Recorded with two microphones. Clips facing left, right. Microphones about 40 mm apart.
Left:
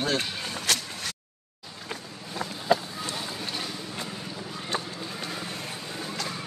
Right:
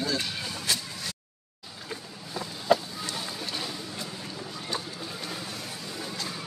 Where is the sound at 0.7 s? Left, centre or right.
Left.